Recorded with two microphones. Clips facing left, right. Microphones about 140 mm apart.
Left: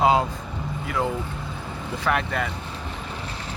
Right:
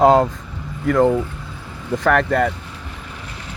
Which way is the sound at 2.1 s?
70° right (ahead or behind).